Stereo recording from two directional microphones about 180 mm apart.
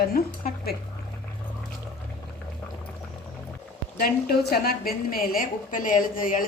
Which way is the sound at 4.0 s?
60° left (ahead or behind).